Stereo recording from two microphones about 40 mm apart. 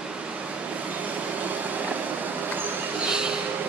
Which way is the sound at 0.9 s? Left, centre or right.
Right.